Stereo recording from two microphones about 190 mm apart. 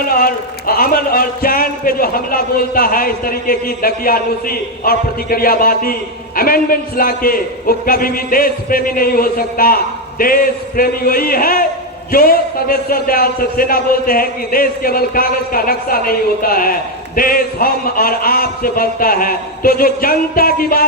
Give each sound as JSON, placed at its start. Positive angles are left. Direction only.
{"t": 0.1, "sound": "a man's voice", "side_deg": 50}